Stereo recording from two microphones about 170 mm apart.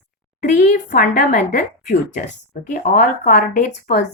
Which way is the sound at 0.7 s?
55° left (ahead or behind).